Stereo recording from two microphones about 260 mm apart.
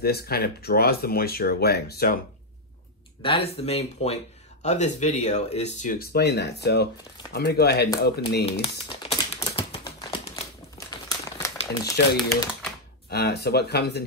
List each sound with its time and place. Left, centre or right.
0.0 s speech: left
3.2 s speech: left
8.5 s crumpling: left
13.1 s speech: left